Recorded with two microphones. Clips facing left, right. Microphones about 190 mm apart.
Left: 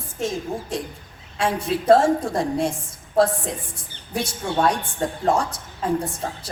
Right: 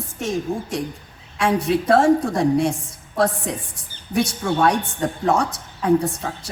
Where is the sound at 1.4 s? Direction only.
70° right (ahead or behind).